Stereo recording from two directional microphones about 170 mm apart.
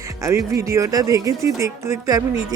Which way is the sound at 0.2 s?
20° right (ahead or behind).